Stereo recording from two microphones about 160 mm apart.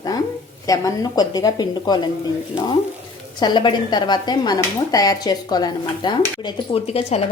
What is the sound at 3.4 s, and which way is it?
Speech, 30° left (ahead or behind).